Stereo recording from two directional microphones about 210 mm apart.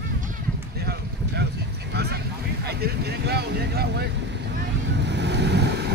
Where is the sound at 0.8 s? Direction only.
50° right (ahead or behind).